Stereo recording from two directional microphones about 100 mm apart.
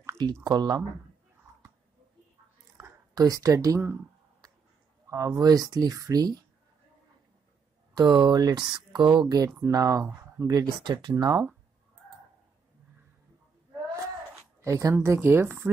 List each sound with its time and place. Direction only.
0.2 s speech: 40° right (ahead or behind)
2.8 s a sound: 35° right (ahead or behind)
5.0 s speech: 35° right (ahead or behind)
7.9 s speech: 45° right (ahead or behind); by 10.5 s 30° right (ahead or behind)
10.5 s speech: 45° right (ahead or behind)
14.6 s speech: 30° right (ahead or behind)
15.0 s speech: 20° right (ahead or behind)